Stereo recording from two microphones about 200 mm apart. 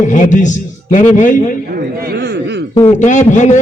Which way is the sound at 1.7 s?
50° right (ahead or behind).